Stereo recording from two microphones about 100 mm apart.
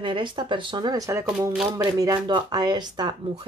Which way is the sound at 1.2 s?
5° right (ahead or behind).